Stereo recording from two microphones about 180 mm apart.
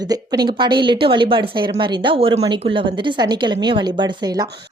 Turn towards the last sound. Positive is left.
turn(degrees=-25)  # may be behind; listen again after turning